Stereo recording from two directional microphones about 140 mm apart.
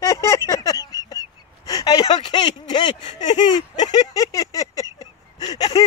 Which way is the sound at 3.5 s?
30° left (ahead or behind).